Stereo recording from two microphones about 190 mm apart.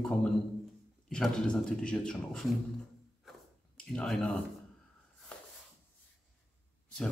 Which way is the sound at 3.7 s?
5° left (ahead or behind).